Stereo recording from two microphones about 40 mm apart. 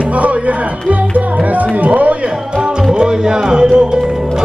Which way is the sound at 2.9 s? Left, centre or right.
Centre.